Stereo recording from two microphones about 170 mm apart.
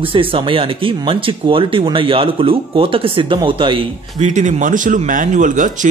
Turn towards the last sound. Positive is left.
turn(degrees=-50)  # may be behind; listen again after turning